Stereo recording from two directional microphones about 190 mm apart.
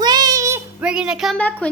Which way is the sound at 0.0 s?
20° right (ahead or behind).